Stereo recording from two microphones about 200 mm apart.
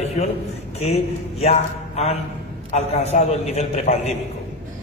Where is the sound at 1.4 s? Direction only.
30° left (ahead or behind).